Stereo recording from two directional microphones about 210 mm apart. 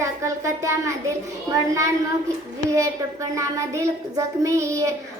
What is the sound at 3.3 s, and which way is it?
A child's voice, 15° right (ahead or behind).